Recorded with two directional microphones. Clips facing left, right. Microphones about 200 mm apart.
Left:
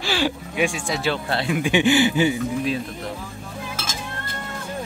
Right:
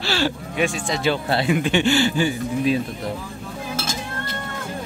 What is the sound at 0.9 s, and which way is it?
Speech, centre (ahead or behind).